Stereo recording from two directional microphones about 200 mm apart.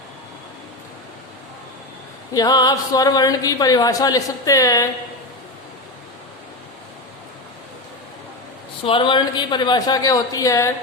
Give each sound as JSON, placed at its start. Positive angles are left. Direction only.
{"t": 2.3, "sound": "speech", "side_deg": 20}
{"t": 8.8, "sound": "a woman's voice", "side_deg": 25}